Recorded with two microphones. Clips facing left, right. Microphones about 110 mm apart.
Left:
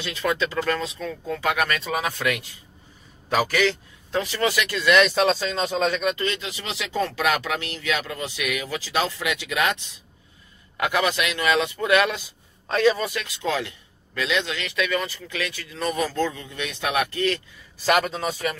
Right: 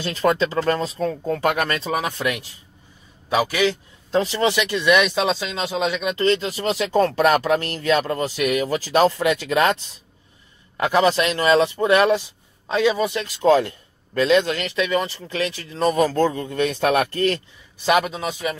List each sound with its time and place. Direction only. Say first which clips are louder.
0.0 s speech: right 5 dB; 40° right (ahead or behind)
3.3 s speech: right 2 dB; 10° right (ahead or behind)
4.1 s speech: right 4 dB; 30° right (ahead or behind); by 6.1 s 10° right (ahead or behind)
6.1 s speech: right 8 dB; 35° right (ahead or behind)
12.7 s speech: right 1 dB; 15° right (ahead or behind)
13.1 s speech: right 10 dB; 35° right (ahead or behind)
18.0 s speech: right 1 dB; 10° right (ahead or behind)